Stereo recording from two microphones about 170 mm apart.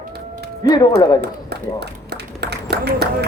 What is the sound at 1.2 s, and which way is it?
Speech, 75° right (ahead or behind).